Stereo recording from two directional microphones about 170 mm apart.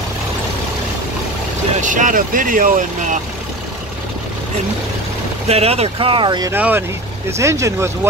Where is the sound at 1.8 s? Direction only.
50° right (ahead or behind).